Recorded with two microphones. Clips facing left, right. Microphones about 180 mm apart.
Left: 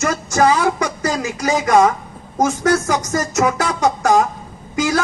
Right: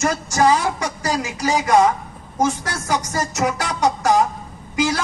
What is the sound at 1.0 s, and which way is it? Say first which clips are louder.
Speech: left 2 dB; 50° left (ahead or behind).